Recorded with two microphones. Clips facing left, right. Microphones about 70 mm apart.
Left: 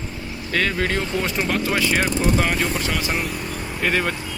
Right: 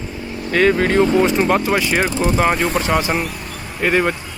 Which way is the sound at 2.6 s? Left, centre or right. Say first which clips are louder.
Right 6 dB; right.